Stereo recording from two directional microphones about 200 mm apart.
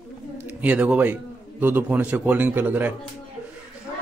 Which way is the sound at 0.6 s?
10° right (ahead or behind).